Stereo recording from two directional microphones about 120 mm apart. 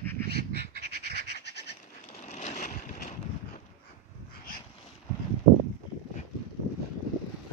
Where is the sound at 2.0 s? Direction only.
65° left (ahead or behind); by 3.2 s 90° left.